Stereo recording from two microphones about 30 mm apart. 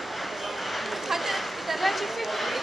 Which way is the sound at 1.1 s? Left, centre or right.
Centre.